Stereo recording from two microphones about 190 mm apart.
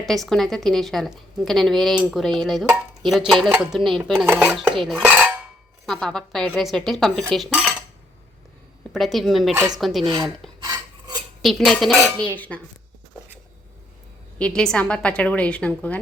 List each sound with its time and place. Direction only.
0.0 s a woman's voice: centre (ahead or behind)
4.3 s dishes: 5° right (ahead or behind)
5.8 s a woman's voice: centre (ahead or behind)
8.9 s a woman's voice: centre (ahead or behind)
10.1 s a sound: 20° right (ahead or behind)
10.6 s filing: 20° right (ahead or behind)
11.4 s a woman's voice: centre (ahead or behind)
14.3 s a woman's voice: 5° left (ahead or behind)